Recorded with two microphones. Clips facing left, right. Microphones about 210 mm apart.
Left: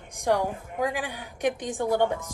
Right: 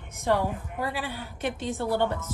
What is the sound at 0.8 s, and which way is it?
A woman's voice, 15° left (ahead or behind).